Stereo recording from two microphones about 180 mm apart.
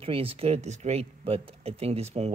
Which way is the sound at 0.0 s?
30° right (ahead or behind).